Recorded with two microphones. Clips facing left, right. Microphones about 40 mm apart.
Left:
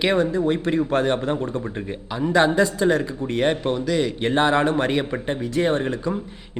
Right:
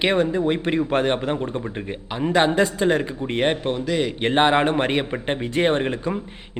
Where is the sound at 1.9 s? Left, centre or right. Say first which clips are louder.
Right 1 dB; right.